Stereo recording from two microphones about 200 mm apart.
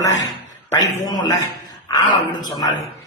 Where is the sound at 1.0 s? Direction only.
20° left (ahead or behind).